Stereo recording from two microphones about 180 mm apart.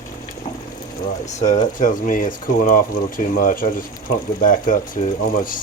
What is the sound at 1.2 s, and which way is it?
Speech, 40° left (ahead or behind).